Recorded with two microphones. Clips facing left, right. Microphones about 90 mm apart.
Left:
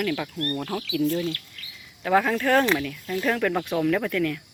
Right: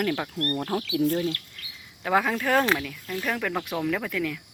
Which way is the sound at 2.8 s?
Centre (ahead or behind).